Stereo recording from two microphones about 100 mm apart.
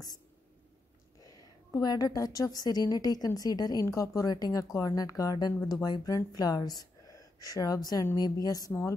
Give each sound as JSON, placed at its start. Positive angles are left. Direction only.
{"t": 1.2, "sound": "a woman's voice", "side_deg": 40}